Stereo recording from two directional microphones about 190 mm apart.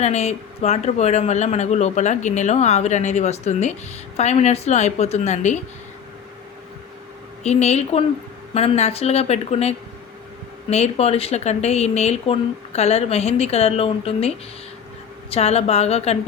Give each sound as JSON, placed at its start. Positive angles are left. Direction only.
{"t": 0.0, "sound": "speech", "side_deg": 35}
{"t": 7.4, "sound": "speech", "side_deg": 35}